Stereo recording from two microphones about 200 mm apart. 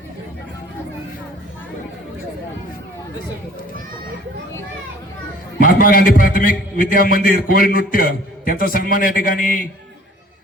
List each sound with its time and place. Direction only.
5.5 s a man's voice: 45° left (ahead or behind)